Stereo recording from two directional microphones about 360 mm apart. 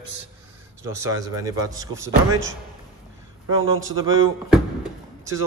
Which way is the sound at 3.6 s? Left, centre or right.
Right.